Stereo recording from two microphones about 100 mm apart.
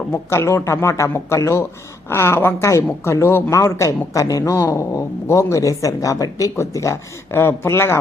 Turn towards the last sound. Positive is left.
turn(degrees=25)  # may be behind; listen again after turning